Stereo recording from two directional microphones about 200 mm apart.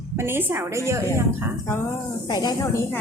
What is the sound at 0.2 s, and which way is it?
A woman's voice, 10° right (ahead or behind).